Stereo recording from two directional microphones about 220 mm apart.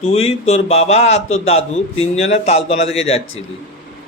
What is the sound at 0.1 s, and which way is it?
A man's voice, 30° left (ahead or behind).